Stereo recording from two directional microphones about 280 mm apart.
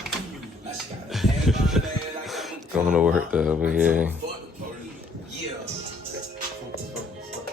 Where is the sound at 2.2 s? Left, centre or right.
Centre.